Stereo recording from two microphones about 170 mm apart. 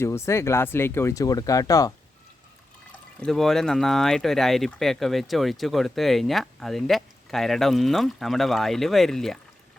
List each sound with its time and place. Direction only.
0.0 s speech: 15° left (ahead or behind)
2.9 s speech: 5° left (ahead or behind)